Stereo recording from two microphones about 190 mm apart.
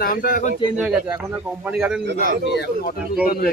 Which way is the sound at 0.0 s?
50° left (ahead or behind).